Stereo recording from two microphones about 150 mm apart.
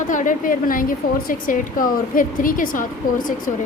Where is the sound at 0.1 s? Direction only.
60° left (ahead or behind).